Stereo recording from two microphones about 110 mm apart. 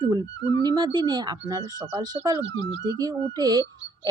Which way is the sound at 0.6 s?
40° right (ahead or behind).